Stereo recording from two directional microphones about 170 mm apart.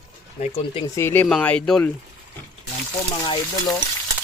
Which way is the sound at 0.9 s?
15° left (ahead or behind).